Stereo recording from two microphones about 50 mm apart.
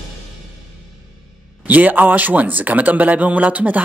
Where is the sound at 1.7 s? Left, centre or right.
Right.